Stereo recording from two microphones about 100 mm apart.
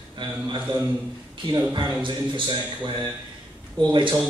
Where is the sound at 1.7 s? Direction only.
55° right (ahead or behind).